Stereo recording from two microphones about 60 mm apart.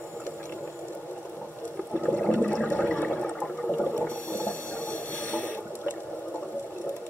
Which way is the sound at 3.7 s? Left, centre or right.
Left.